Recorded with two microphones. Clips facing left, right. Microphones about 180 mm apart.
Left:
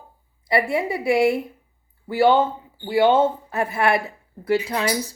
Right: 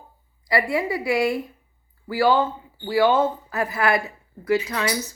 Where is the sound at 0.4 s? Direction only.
25° left (ahead or behind).